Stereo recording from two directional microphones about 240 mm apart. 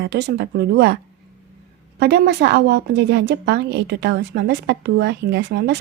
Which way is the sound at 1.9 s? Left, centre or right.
Right.